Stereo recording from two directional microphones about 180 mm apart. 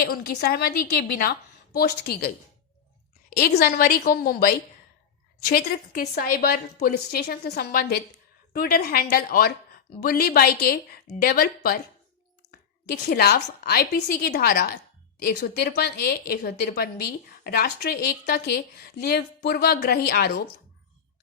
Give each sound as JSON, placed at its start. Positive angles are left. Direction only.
{"t": 0.0, "sound": "a woman's voice", "side_deg": 60}
{"t": 3.2, "sound": "a sound", "side_deg": 60}
{"t": 3.6, "sound": "a woman's voice", "side_deg": 55}
{"t": 13.1, "sound": "a woman's voice", "side_deg": 60}